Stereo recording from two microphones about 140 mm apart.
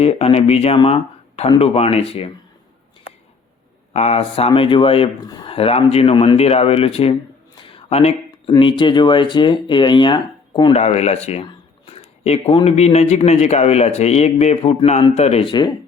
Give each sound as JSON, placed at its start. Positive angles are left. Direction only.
{"t": 0.0, "sound": "speech", "side_deg": 45}
{"t": 3.9, "sound": "speech", "side_deg": 50}
{"t": 10.8, "sound": "speech", "side_deg": 50}